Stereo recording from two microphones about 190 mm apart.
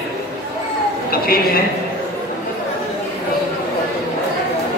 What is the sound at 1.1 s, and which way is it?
Speech, 50° left (ahead or behind).